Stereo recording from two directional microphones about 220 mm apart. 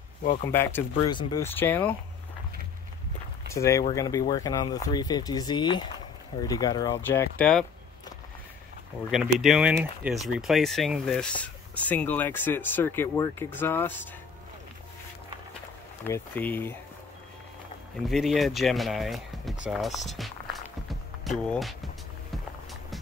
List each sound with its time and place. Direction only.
0.5 s speech: 10° left (ahead or behind)
3.5 s speech: 15° left (ahead or behind)
9.1 s speech: centre (ahead or behind)
16.1 s speech: 10° left (ahead or behind)
18.0 s speech: centre (ahead or behind)
20.1 s walk: centre (ahead or behind)
21.2 s speech: centre (ahead or behind)